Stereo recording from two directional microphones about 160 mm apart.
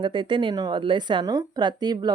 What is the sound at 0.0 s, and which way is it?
A woman's voice, 30° right (ahead or behind).